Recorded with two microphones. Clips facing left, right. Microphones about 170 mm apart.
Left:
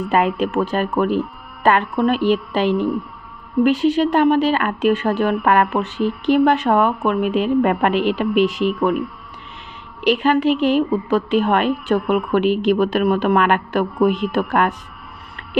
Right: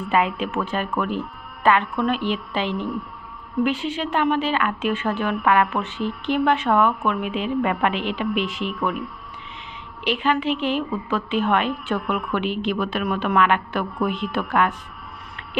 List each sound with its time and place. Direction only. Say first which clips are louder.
0.0 s a woman's voice: left 4 dB; 40° left (ahead or behind)
10.0 s a woman's voice: left 6 dB; 40° left (ahead or behind)